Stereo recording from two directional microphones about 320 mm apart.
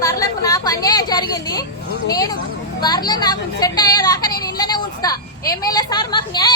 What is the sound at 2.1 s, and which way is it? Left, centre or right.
A woman's voice, centre.